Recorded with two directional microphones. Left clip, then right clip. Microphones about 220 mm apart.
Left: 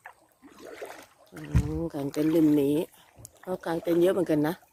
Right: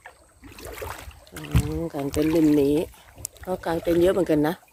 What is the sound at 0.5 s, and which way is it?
Boat, 25° right (ahead or behind).